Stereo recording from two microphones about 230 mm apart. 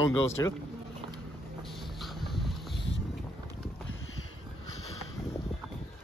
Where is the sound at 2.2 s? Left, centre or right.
Centre.